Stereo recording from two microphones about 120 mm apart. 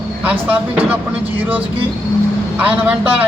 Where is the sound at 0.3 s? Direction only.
15° right (ahead or behind).